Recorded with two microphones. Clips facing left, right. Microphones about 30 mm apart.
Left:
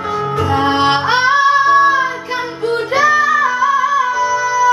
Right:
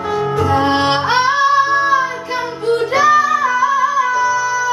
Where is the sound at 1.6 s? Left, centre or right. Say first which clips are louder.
Left 3 dB; left.